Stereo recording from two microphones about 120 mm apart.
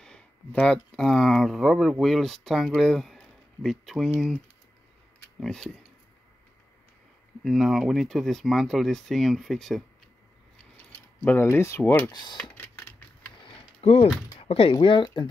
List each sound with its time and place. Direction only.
0.0 s speech: 10° left (ahead or behind)
5.4 s speech: centre (ahead or behind)
7.4 s speech: centre (ahead or behind)
10.9 s mechanisms: 15° left (ahead or behind)
11.5 s speech: 25° left (ahead or behind)
12.1 s speech: 35° left (ahead or behind)
12.5 s typing: 15° left (ahead or behind)
13.4 s mechanisms: 50° left (ahead or behind)
14.4 s speech: 50° left (ahead or behind)